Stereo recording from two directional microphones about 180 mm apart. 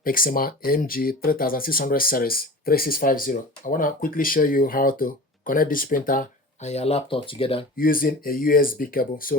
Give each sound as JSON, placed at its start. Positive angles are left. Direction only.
{"t": 0.0, "sound": "speech", "side_deg": 50}
{"t": 7.8, "sound": "speech", "side_deg": 50}